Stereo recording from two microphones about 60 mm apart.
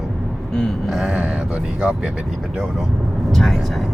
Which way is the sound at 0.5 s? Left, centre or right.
Centre.